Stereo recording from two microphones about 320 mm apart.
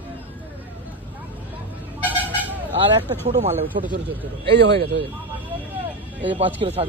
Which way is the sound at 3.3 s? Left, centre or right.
Right.